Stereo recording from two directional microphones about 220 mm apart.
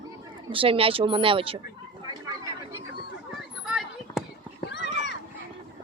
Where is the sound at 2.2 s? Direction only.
15° right (ahead or behind).